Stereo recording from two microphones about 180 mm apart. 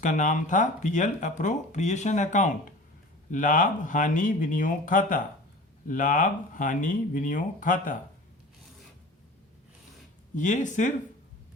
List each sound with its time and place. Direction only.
0.0 s speech: 45° left (ahead or behind)
10.3 s speech: 45° left (ahead or behind)